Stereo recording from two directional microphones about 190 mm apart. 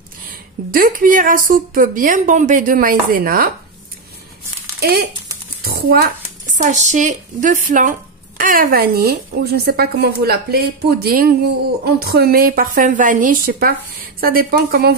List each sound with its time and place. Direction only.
0.7 s a woman's voice: 50° right (ahead or behind)
4.7 s a woman's voice: 55° right (ahead or behind)